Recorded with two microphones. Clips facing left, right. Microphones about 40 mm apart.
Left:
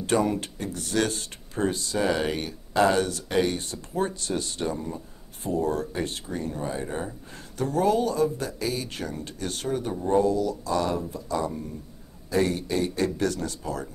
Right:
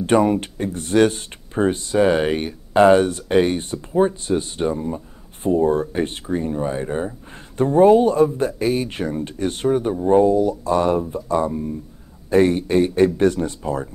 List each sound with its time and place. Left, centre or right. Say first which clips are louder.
0.0 s speech: right 8 dB; right